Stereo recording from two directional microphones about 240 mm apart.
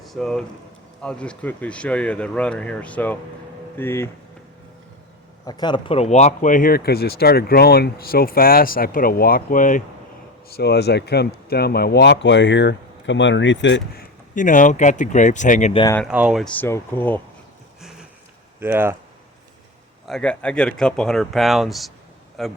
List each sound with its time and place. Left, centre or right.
0.0 s speech: centre
5.5 s speech: centre
15.8 s speech: centre
16.0 s speech: centre
18.6 s speech: centre
20.1 s speech: centre